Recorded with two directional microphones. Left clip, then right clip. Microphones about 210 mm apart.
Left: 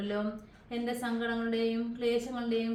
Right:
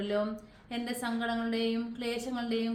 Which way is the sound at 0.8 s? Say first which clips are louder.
Left 1 dB; 50° right (ahead or behind).